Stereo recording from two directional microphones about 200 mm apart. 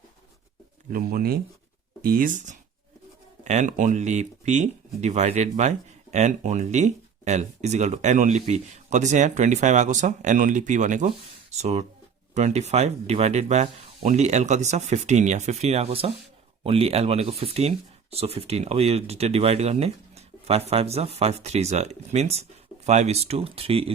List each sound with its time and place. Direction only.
0.9 s speech: 45° right (ahead or behind); by 23.9 s 30° right (ahead or behind)